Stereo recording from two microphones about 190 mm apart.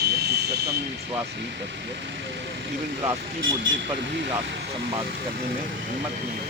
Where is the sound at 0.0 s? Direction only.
60° right (ahead or behind).